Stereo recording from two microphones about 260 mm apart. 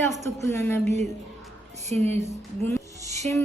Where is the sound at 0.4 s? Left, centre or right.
Centre.